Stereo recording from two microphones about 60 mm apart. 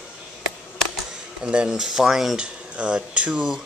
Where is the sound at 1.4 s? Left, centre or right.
Centre.